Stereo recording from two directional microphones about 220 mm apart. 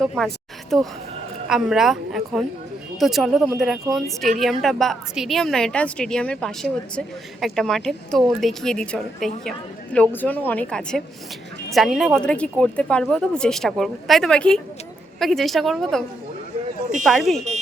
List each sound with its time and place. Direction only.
0.0 s a woman's voice: centre (ahead or behind)